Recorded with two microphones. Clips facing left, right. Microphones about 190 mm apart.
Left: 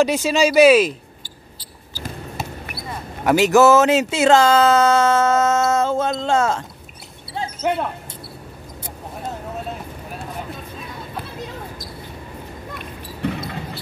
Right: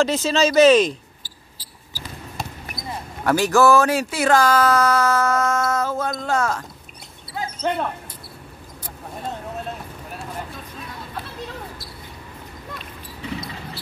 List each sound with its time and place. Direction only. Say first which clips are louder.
0.0 s speech: left 2 dB; 15° left (ahead or behind)
3.3 s speech: left 3 dB; 20° left (ahead or behind)
7.7 s speech: left 2 dB; 10° left (ahead or behind)
12.7 s a sound: left 4 dB; 55° left (ahead or behind)